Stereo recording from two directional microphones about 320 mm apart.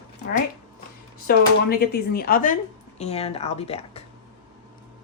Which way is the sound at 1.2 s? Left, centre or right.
Left.